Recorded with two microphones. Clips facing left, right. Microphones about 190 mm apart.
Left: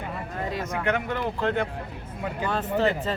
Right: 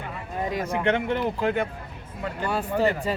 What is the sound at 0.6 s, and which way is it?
Speech, 30° right (ahead or behind).